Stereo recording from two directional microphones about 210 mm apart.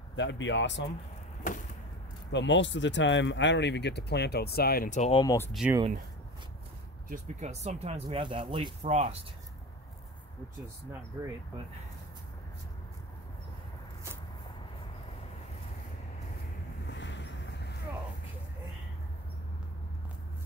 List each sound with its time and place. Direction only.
0.1 s speech: 60° left (ahead or behind)
1.5 s vehicle: 40° left (ahead or behind)
2.3 s speech: 60° left (ahead or behind); by 5.2 s 35° left (ahead or behind)
5.2 s speech: 15° left (ahead or behind)
5.5 s speech: centre (ahead or behind)
7.1 s speech: 35° right (ahead or behind)
16.9 s vehicle: 55° left (ahead or behind)